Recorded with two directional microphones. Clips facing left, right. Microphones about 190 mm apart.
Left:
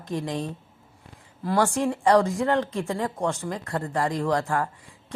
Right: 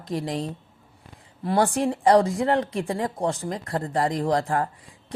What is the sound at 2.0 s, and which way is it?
Speech, 30° right (ahead or behind).